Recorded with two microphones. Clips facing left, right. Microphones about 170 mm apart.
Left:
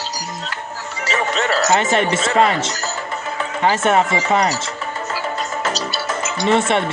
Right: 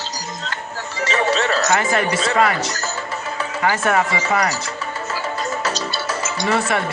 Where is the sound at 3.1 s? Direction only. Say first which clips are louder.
Left 1 dB; 25° left (ahead or behind).